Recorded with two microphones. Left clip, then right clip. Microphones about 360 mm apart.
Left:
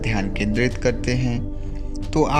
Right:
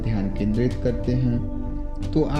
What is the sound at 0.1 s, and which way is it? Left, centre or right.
Speech, centre.